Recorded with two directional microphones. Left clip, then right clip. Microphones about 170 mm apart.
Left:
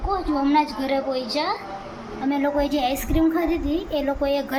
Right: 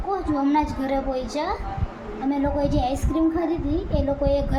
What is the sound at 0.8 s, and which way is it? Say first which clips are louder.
A woman's voice: left 1 dB; 5° right (ahead or behind).